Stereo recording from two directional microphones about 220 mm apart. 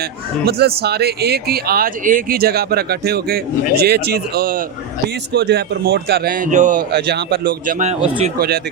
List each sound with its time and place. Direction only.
0.4 s speech: 45° right (ahead or behind)